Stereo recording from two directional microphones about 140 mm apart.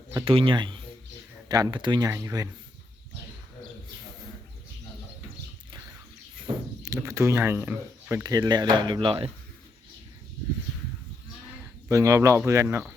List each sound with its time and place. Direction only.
0.3 s speech: 40° right (ahead or behind)
6.8 s speech: 20° right (ahead or behind)
8.2 s speech: 25° right (ahead or behind)
11.9 s speech: 20° right (ahead or behind)